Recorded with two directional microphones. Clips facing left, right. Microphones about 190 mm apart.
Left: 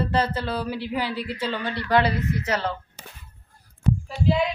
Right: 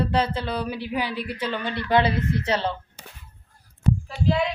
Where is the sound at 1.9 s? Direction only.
25° right (ahead or behind).